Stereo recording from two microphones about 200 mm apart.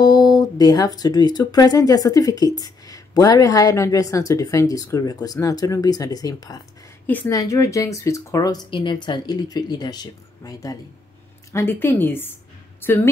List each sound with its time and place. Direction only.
0.0 s speech: 20° left (ahead or behind)